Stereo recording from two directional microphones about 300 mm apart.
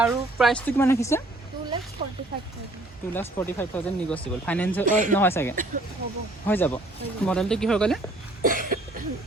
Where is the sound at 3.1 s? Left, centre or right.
Centre.